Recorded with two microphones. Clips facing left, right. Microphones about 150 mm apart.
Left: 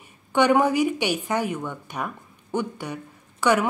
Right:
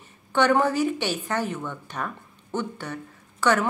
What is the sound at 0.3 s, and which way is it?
A woman's voice, 15° left (ahead or behind).